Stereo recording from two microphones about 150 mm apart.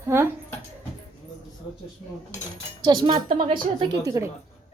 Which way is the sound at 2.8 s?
30° right (ahead or behind).